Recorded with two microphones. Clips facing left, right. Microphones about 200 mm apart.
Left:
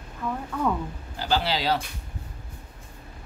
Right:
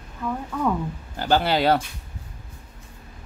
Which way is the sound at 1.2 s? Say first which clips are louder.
Right 5 dB; 55° right (ahead or behind).